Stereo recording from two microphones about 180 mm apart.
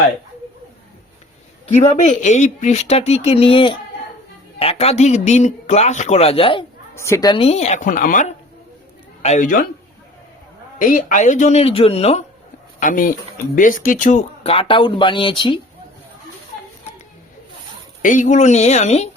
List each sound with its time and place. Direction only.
1.6 s speech: 40° left (ahead or behind)
6.9 s a man's voice: 15° left (ahead or behind); by 9.6 s 45° left (ahead or behind)
10.8 s speech: 45° left (ahead or behind)
12.8 s speech: 50° left (ahead or behind); by 15.6 s 30° left (ahead or behind)
18.0 s speech: 45° left (ahead or behind)